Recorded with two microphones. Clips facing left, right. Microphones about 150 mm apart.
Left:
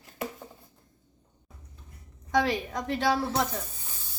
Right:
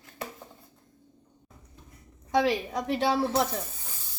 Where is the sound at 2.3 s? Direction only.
30° right (ahead or behind).